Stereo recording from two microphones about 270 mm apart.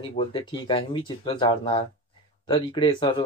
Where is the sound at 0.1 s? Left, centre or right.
Centre.